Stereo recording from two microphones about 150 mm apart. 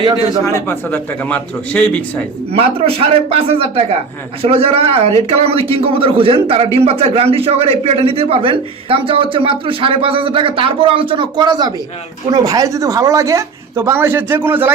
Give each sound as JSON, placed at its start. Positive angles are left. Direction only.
{"t": 0.3, "sound": "a man's voice", "side_deg": 20}
{"t": 2.5, "sound": "a man's voice", "side_deg": -40}